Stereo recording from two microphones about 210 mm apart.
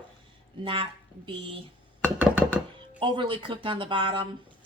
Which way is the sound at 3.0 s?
25° right (ahead or behind).